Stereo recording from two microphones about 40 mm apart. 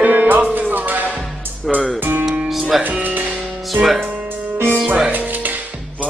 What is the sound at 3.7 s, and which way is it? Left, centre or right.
Speech, centre.